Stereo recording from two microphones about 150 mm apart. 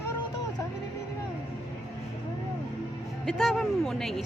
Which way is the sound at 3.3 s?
Centre (ahead or behind).